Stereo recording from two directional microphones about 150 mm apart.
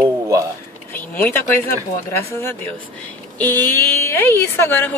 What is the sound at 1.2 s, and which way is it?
Speech, 15° left (ahead or behind).